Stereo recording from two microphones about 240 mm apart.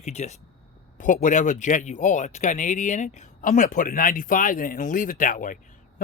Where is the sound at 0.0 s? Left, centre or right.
Left.